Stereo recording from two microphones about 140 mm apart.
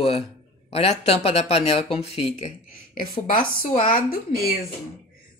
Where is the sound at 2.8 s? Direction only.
75° left (ahead or behind).